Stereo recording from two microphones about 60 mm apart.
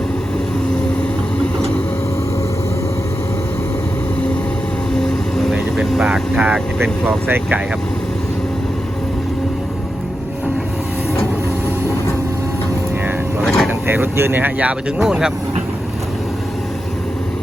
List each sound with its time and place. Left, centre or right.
4.9 s vehicle: centre
6.3 s vehicle: right
6.8 s speech: centre
7.3 s speech: right
13.4 s vehicle: centre
13.7 s speech: right; by 15.3 s centre